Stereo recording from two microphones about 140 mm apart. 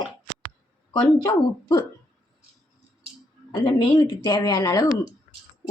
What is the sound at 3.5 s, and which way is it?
A woman's voice, 35° left (ahead or behind).